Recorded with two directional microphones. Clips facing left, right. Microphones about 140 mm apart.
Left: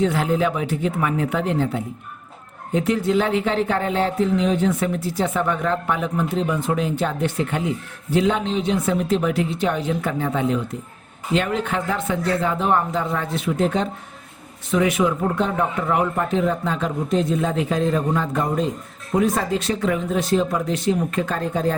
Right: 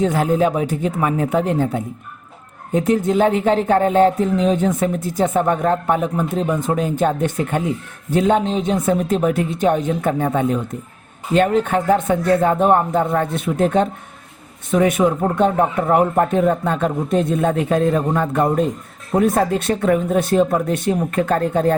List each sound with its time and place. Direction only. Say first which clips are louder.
0.0 s a man's voice: right 3 dB; 45° right (ahead or behind)